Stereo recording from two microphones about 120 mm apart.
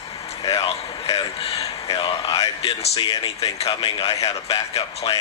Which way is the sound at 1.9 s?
45° left (ahead or behind).